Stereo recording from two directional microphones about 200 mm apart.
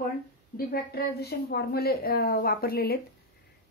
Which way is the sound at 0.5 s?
50° left (ahead or behind).